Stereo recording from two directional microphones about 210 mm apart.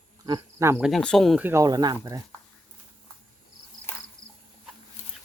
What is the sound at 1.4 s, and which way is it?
Speech, 15° right (ahead or behind).